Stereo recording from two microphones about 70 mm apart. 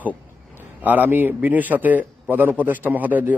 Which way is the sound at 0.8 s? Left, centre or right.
Right.